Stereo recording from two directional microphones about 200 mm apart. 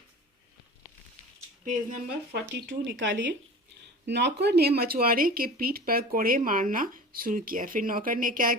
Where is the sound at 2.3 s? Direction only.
55° right (ahead or behind).